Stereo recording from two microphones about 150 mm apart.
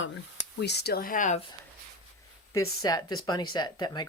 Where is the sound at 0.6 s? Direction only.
90° left; by 1.3 s 60° left (ahead or behind).